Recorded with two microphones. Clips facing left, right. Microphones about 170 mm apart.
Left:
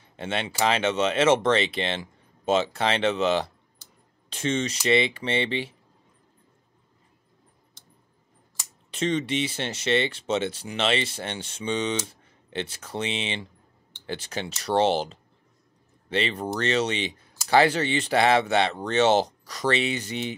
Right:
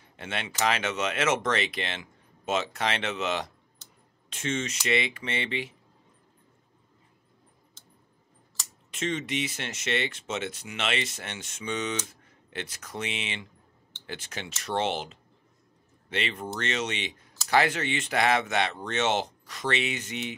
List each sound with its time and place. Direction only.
0.2 s speech: 30° left (ahead or behind)
8.9 s speech: 35° left (ahead or behind)